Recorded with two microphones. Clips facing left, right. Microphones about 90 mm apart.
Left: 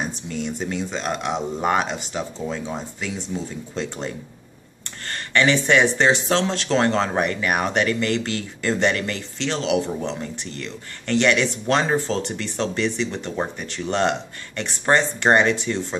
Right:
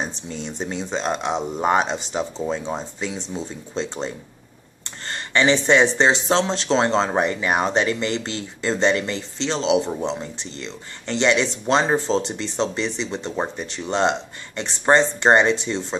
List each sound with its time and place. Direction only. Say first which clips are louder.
0.0 s speech: left 2 dB; 25° right (ahead or behind)